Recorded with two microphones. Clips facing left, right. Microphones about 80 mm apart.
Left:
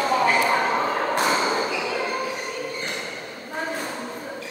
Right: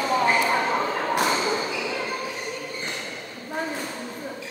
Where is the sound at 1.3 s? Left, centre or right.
Left.